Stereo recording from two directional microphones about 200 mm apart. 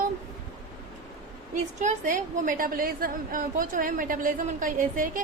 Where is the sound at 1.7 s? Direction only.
40° right (ahead or behind).